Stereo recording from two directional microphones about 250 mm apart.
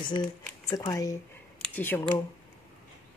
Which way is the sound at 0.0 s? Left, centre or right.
Centre.